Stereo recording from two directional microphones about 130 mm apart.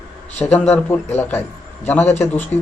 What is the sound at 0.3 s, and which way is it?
Speech, 10° left (ahead or behind).